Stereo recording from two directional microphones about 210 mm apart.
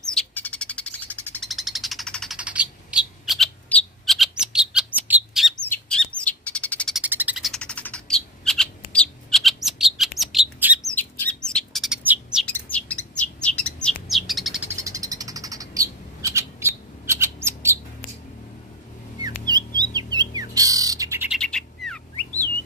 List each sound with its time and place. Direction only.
0.0 s bird: 5° left (ahead or behind)
5.7 s chirp: 5° left (ahead or behind)
6.1 s bird: 5° left (ahead or behind)
7.0 s bird: 10° right (ahead or behind)
19.8 s bird: 20° right (ahead or behind)
21.4 s bird: 5° left (ahead or behind)